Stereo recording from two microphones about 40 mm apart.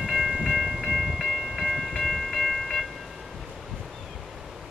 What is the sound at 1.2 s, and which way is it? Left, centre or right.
Train, centre.